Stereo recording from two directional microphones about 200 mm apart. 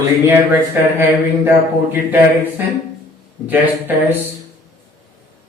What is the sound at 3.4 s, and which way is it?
Speech, 10° right (ahead or behind).